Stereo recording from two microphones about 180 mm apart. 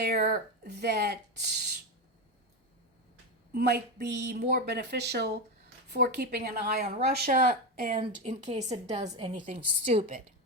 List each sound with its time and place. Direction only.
0.2 s speech: 60° right (ahead or behind)
3.5 s a woman's voice: 60° right (ahead or behind)
7.9 s a woman's voice: 30° right (ahead or behind)